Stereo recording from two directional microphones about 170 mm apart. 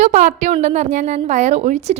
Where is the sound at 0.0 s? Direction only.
45° right (ahead or behind).